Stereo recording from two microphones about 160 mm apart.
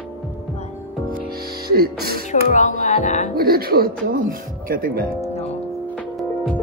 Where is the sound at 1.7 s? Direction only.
75° right (ahead or behind).